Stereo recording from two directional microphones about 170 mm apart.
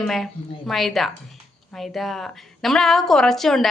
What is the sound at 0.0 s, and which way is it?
A woman's voice, centre (ahead or behind).